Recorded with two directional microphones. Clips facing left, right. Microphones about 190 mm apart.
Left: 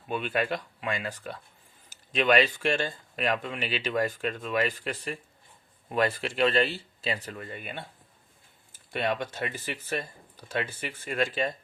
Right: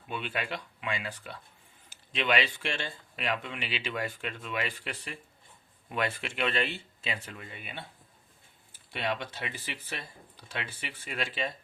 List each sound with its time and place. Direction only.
0.1 s speech: 45° left (ahead or behind)